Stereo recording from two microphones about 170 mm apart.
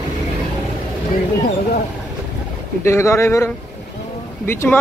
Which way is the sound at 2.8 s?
15° left (ahead or behind).